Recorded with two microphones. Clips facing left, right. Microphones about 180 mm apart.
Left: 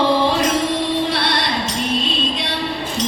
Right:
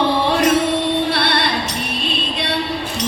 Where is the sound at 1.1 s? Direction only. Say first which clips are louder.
Right 2 dB; 65° right (ahead or behind).